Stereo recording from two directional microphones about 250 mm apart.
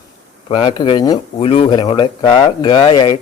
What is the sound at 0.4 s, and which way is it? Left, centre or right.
Speech, left.